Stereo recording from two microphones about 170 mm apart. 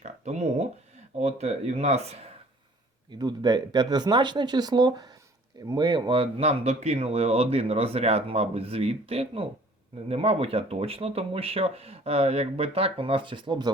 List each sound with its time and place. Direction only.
0.0 s speech: 40° right (ahead or behind)
3.1 s speech: 25° right (ahead or behind)